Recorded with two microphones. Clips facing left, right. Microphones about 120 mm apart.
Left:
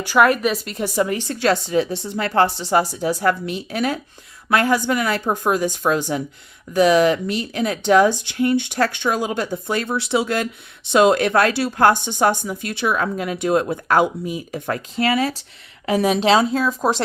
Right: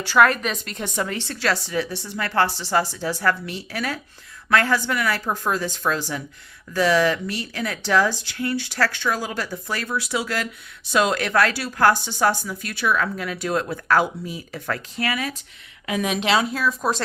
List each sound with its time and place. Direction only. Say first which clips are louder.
0.0 s a woman's voice: left 2 dB; 15° left (ahead or behind)